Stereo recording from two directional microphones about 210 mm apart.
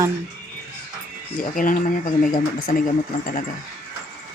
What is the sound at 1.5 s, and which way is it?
Speech, 40° left (ahead or behind).